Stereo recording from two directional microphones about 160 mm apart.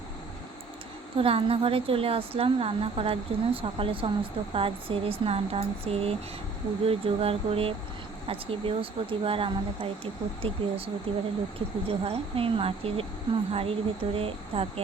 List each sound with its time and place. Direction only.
1.1 s a woman's voice: 35° right (ahead or behind)